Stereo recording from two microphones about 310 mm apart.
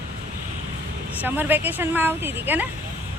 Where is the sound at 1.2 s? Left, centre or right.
Centre.